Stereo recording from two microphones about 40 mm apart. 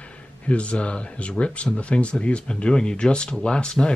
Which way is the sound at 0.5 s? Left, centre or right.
Left.